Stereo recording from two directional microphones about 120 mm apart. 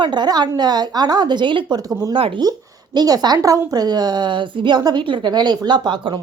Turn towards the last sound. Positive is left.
turn(degrees=-40)  # may be behind; listen again after turning